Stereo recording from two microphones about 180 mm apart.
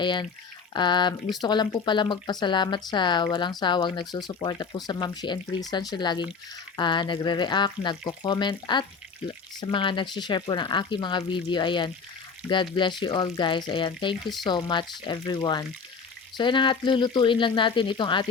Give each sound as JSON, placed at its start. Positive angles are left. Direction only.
{"t": 0.0, "sound": "speech", "side_deg": 25}